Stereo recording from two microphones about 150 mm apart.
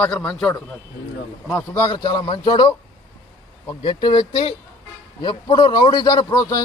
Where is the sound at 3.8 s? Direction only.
35° left (ahead or behind).